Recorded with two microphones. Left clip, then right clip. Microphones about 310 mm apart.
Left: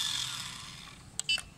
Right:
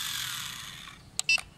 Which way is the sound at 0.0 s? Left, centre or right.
Centre.